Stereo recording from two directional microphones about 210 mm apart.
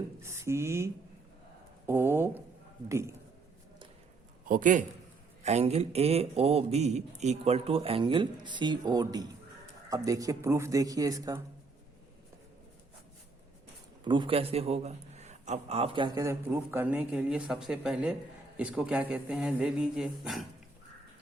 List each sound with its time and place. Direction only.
0.2 s speech: 15° right (ahead or behind)
1.9 s a sound: 10° right (ahead or behind)
2.9 s a man's voice: 15° right (ahead or behind)
4.4 s a man's voice: 40° right (ahead or behind); by 11.3 s 15° right (ahead or behind)
14.0 s a man's voice: 20° right (ahead or behind); by 20.5 s centre (ahead or behind)